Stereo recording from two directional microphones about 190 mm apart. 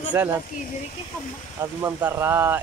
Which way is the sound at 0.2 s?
10° right (ahead or behind).